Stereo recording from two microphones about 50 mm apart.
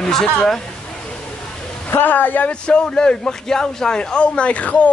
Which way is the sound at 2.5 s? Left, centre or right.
Centre.